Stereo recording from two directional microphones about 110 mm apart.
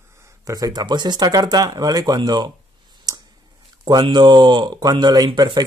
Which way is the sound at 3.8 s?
45° right (ahead or behind).